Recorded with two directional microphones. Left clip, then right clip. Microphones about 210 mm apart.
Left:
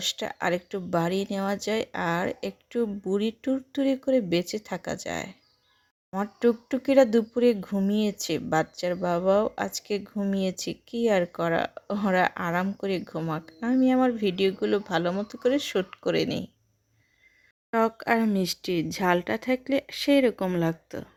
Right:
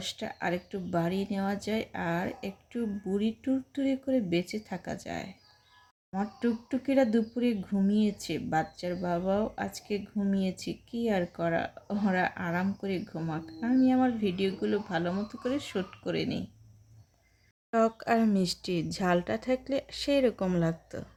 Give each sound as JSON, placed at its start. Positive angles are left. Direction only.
{"t": 0.0, "sound": "speech", "side_deg": 40}
{"t": 17.7, "sound": "speech", "side_deg": 25}